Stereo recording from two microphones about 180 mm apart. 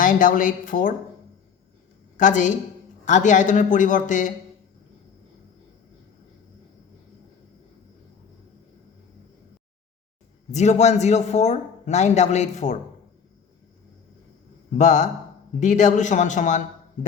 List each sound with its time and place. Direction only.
0.0 s speech: 50° left (ahead or behind)
2.1 s a woman's voice: 45° left (ahead or behind)
10.5 s speech: 40° left (ahead or behind)
14.8 s speech: 40° left (ahead or behind)